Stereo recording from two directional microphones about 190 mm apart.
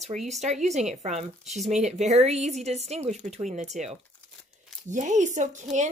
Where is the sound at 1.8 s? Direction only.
35° right (ahead or behind).